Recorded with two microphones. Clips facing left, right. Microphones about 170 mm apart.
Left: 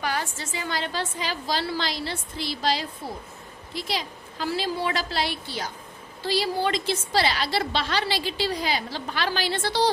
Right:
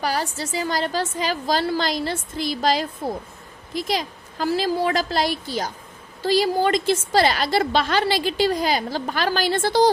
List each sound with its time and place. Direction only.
0.0 s a woman's voice: 35° right (ahead or behind)